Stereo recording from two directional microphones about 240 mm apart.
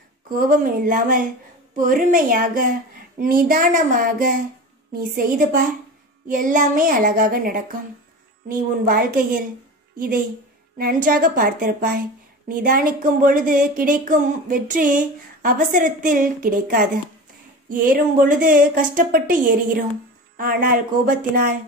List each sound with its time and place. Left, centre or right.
0.3 s a woman's voice: right